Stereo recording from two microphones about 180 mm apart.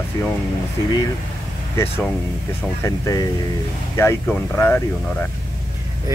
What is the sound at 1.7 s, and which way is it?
Speech, 10° left (ahead or behind).